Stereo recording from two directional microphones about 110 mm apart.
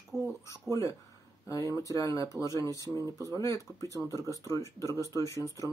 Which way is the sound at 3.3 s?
30° left (ahead or behind).